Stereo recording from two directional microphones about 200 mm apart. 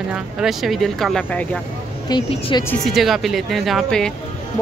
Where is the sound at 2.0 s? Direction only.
20° left (ahead or behind).